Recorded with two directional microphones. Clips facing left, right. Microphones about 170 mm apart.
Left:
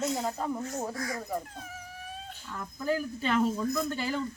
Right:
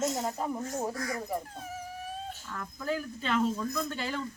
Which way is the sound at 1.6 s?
45° right (ahead or behind).